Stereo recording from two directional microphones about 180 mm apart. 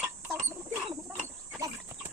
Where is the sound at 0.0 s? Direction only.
10° right (ahead or behind).